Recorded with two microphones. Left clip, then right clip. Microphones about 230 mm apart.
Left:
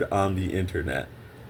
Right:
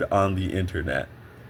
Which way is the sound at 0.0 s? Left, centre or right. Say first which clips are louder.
Right 2 dB; right.